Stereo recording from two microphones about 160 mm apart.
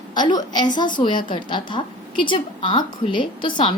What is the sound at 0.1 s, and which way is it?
A woman's voice, 25° left (ahead or behind).